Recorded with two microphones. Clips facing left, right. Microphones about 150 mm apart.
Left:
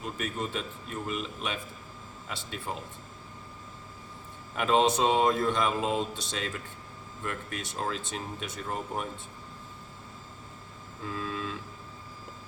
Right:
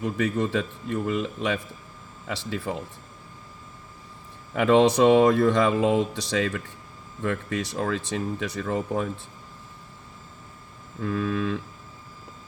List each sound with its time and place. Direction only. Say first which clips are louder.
0.0 s mantra: right 9 dB; 75° right (ahead or behind)
4.5 s mantra: right 6 dB; 70° right (ahead or behind)
11.0 s mantra: right 9 dB; 65° right (ahead or behind)